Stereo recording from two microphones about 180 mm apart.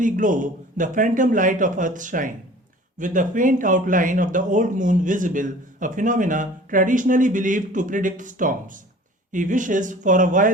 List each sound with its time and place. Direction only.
0.0 s speech: 45° right (ahead or behind)